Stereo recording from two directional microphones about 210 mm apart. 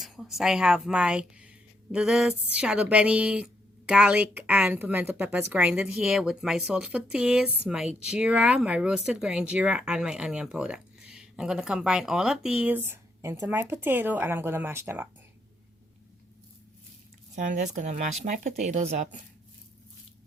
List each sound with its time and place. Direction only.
0.0 s a woman's voice: centre (ahead or behind)
17.3 s speech: 35° right (ahead or behind)